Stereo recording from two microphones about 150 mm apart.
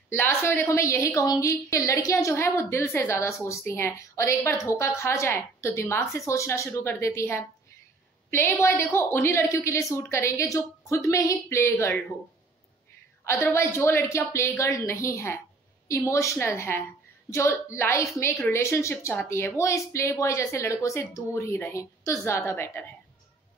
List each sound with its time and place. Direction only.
0.1 s a woman's voice: 15° left (ahead or behind)
13.2 s a woman's voice: 15° left (ahead or behind)